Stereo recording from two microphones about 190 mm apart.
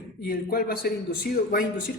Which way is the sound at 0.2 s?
50° left (ahead or behind).